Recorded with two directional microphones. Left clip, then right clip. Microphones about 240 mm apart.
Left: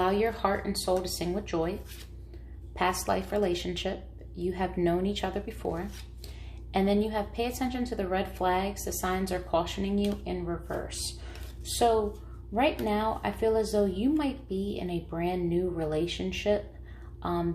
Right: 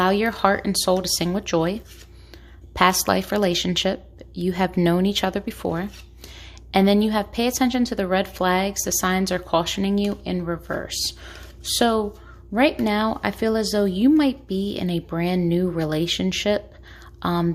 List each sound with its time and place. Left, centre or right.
0.0 s a woman's voice: right
2.7 s a woman's voice: right